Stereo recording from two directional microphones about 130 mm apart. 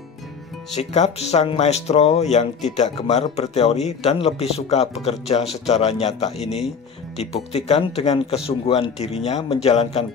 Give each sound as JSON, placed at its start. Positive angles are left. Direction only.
{"t": 0.7, "sound": "speech", "side_deg": 60}